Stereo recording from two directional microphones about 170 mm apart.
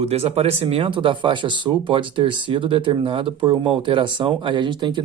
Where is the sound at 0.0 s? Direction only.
35° right (ahead or behind).